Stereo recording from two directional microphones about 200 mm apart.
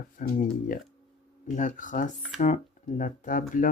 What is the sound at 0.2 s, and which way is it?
Speech, 45° left (ahead or behind).